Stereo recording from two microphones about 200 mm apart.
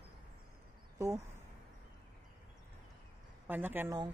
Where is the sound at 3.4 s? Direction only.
10° right (ahead or behind).